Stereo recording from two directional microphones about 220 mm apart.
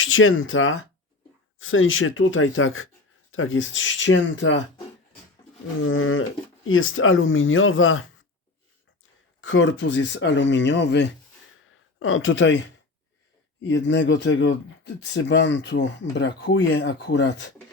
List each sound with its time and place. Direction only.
0.0 s speech: 65° left (ahead or behind)
5.8 s speech: 65° left (ahead or behind)
9.4 s speech: 55° left (ahead or behind)
11.7 s speech: 65° left (ahead or behind)
13.7 s speech: 55° left (ahead or behind)